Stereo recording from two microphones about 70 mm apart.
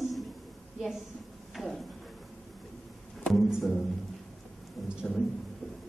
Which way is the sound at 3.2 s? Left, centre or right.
Centre.